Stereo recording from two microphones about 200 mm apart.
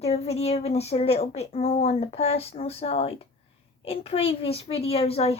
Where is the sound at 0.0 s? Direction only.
30° left (ahead or behind).